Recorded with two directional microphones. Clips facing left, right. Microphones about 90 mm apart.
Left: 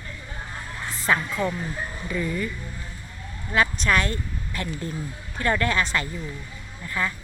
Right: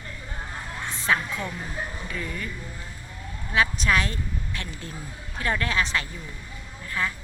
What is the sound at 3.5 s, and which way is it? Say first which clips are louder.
A woman's voice: left 1 dB; centre (ahead or behind).